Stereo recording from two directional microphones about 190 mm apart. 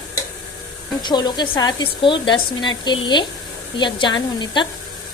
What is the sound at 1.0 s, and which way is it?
Speech, 25° left (ahead or behind).